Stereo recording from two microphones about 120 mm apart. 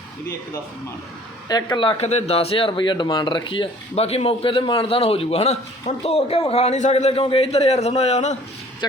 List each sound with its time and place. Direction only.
1.5 s speech: 35° left (ahead or behind)
2.0 s speech: 65° left (ahead or behind)
8.8 s speech: 35° left (ahead or behind)